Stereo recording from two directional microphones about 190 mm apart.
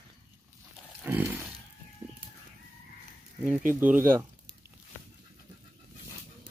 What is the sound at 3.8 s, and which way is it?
Speech, 10° right (ahead or behind).